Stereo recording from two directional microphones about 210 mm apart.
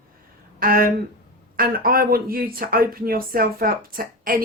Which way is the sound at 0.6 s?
45° right (ahead or behind).